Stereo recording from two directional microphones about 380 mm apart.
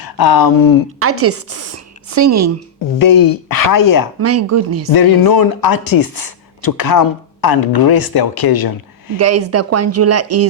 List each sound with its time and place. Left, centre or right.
0.0 s speech: left
0.9 s a woman's voice: right
3.0 s speech: left
4.2 s a woman's voice: right
4.9 s speech: left
9.1 s a woman's voice: right